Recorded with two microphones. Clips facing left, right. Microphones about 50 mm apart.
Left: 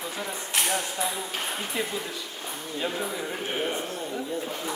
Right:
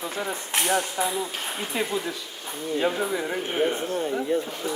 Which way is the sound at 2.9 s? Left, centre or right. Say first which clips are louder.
Right 3 dB; centre.